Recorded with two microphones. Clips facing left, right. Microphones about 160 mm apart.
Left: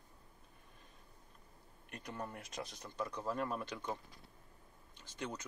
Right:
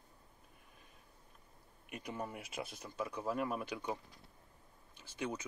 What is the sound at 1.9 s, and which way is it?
A man's voice, 10° right (ahead or behind).